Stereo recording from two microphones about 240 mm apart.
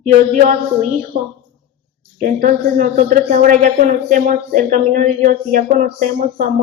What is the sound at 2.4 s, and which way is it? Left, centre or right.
Speech, right.